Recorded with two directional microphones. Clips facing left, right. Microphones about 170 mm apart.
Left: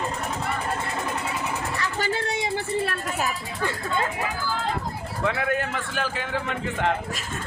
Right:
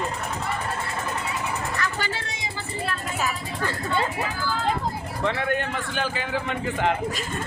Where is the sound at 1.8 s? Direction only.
30° left (ahead or behind).